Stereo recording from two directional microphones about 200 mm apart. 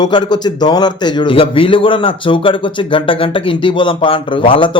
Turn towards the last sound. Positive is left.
turn(degrees=25)  # may be behind; listen again after turning